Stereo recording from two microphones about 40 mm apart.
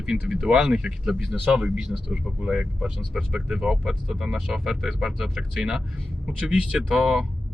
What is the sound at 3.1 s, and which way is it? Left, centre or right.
Speech, centre.